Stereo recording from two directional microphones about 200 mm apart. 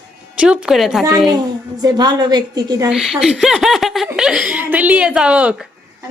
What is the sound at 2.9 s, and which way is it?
Speech, centre (ahead or behind).